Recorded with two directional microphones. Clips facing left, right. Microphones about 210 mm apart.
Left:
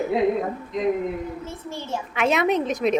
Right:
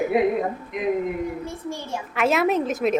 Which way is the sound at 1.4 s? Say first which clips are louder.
Right 2 dB; 15° right (ahead or behind).